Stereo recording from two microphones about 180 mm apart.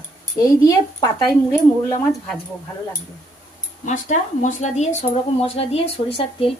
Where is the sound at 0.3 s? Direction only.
20° left (ahead or behind).